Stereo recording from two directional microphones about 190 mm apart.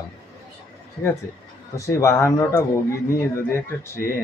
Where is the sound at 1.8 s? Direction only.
15° left (ahead or behind).